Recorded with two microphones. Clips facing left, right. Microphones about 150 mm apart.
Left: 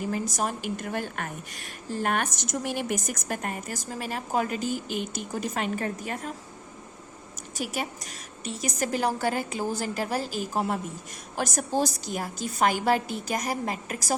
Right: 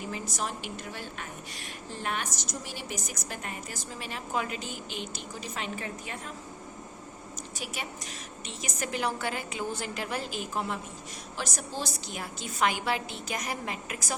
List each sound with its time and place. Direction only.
0.1 s a woman's voice: 45° left (ahead or behind)
7.5 s a woman's voice: 40° left (ahead or behind)